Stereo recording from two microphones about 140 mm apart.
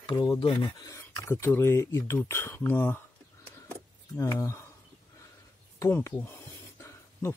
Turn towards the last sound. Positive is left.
turn(degrees=20)  # may be behind; listen again after turning